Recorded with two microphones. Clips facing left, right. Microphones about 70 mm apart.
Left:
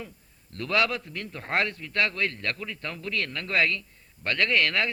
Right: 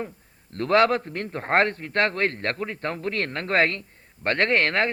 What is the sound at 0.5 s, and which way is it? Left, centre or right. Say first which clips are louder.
A man's voice: right 7 dB; right.